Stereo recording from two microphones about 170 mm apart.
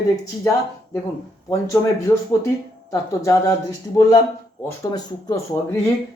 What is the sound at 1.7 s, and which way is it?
Speech, 20° left (ahead or behind).